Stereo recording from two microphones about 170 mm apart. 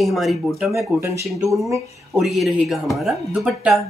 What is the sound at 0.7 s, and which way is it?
Speech, 15° right (ahead or behind).